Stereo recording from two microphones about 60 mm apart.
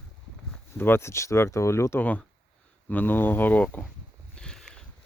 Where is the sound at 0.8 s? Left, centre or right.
Left.